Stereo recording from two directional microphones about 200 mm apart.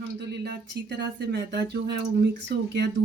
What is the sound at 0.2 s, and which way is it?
Speech, 55° right (ahead or behind).